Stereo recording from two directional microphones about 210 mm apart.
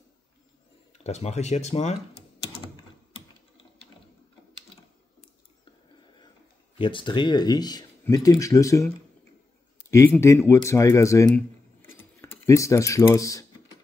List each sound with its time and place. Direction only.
0.9 s speech: 30° left (ahead or behind)
6.8 s speech: 25° left (ahead or behind)
11.3 s a sound: 10° left (ahead or behind)